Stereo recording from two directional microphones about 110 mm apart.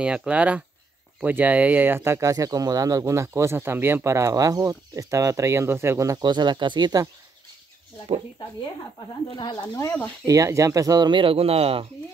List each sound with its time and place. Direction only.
0.0 s speech: 10° right (ahead or behind); by 7.1 s 40° right (ahead or behind)
9.3 s speech: 40° left (ahead or behind)
10.2 s speech: 30° right (ahead or behind); by 11.9 s 65° right (ahead or behind)